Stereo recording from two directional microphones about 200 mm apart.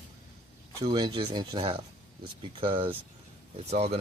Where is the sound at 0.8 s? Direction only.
20° right (ahead or behind).